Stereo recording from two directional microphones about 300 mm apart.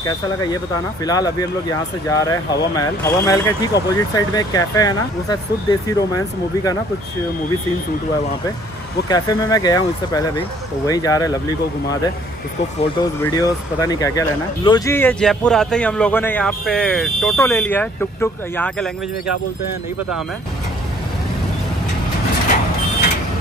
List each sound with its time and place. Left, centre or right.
0.0 s speech: centre
9.1 s speech: centre
13.0 s speech: centre